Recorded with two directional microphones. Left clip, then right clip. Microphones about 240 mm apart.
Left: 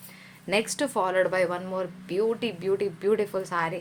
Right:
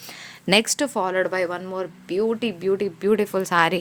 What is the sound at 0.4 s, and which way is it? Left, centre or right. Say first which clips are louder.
Speech: right 7 dB; right.